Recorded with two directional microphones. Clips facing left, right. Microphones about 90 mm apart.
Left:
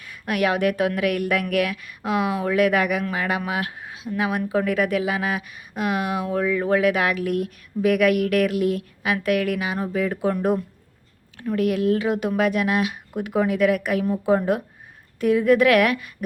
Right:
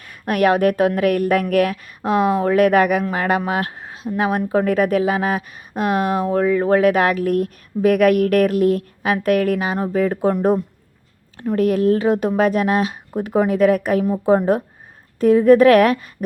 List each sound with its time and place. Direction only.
0.0 s speech: 45° right (ahead or behind)
11.5 s speech: 40° right (ahead or behind)